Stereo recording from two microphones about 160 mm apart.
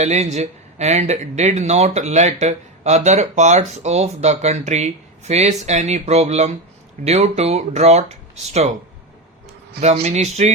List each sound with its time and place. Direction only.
0.0 s speech: 45° right (ahead or behind)
9.8 s speech: 45° right (ahead or behind)